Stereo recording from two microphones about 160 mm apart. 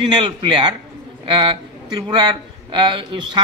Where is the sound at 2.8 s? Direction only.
30° right (ahead or behind).